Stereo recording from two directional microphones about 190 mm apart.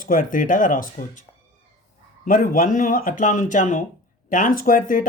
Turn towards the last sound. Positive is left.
turn(degrees=50)  # may be behind; listen again after turning